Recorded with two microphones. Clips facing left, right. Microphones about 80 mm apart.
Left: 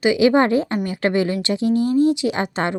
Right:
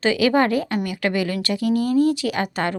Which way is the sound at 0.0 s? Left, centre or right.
Centre.